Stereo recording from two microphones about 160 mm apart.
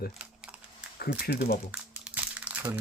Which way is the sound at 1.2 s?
75° left (ahead or behind).